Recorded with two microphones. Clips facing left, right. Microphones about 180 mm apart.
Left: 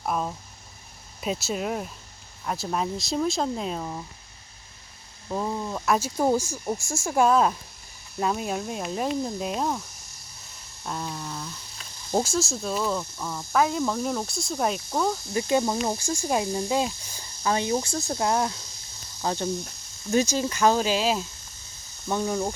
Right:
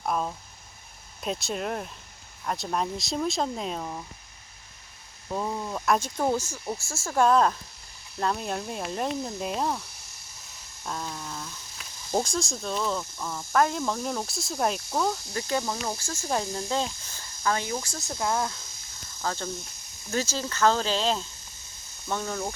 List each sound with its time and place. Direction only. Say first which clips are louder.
0.0 s speech: left 1 dB; centre (ahead or behind)
5.3 s speech: left 2 dB; centre (ahead or behind)
10.8 s speech: left 2 dB; 5° left (ahead or behind)
15.3 s speech: left 5 dB; 20° left (ahead or behind)